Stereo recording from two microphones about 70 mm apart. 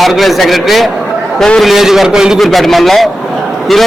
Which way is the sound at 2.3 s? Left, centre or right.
Centre.